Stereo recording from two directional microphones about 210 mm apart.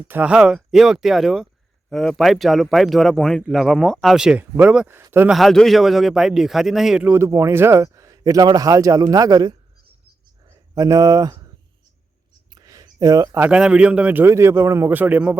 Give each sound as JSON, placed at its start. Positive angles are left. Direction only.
{"t": 0.1, "sound": "speech", "side_deg": -5}
{"t": 12.5, "sound": "speech", "side_deg": -20}